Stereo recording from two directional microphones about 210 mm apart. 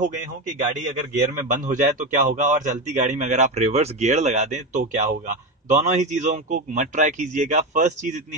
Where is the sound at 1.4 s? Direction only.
40° right (ahead or behind).